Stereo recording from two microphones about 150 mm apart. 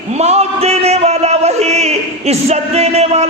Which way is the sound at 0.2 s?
45° right (ahead or behind).